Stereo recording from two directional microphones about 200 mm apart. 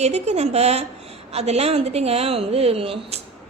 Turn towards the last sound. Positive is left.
turn(degrees=-30)  # may be behind; listen again after turning